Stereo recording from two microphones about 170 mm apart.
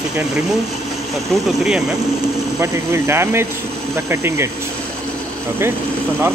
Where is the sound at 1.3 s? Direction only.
5° right (ahead or behind).